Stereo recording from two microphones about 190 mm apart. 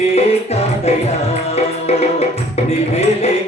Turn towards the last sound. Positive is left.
turn(degrees=35)  # may be behind; listen again after turning